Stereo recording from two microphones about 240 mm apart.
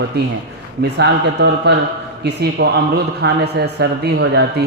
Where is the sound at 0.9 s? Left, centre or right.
Right.